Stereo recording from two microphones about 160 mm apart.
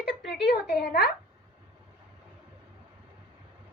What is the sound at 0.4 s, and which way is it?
Speech, 85° left.